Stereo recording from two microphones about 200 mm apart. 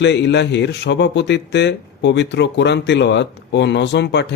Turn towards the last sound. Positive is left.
turn(degrees=60)  # may be behind; listen again after turning